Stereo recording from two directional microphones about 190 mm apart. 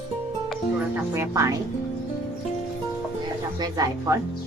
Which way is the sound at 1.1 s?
15° right (ahead or behind).